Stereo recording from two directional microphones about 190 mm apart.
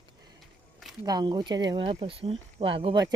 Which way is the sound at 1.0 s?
20° right (ahead or behind).